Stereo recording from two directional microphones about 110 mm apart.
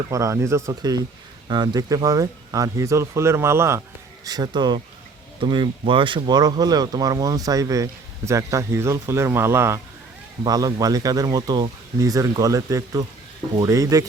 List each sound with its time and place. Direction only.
0.1 s speech: 30° right (ahead or behind)
0.8 s speech: 35° right (ahead or behind)
4.3 s speech: 40° right (ahead or behind); by 9.8 s 25° right (ahead or behind)
10.4 s speech: 35° right (ahead or behind)